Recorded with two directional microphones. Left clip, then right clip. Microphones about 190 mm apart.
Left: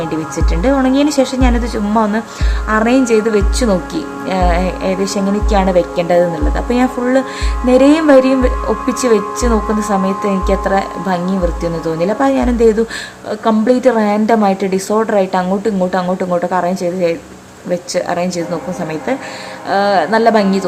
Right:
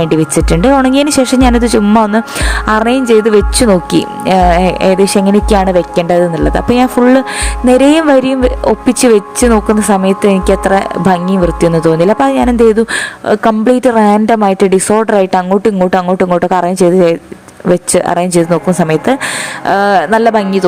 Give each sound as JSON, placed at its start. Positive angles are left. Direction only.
{"t": 0.0, "sound": "a woman's voice", "side_deg": -40}